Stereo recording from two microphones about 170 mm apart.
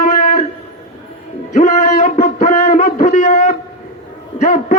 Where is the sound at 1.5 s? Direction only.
45° left (ahead or behind).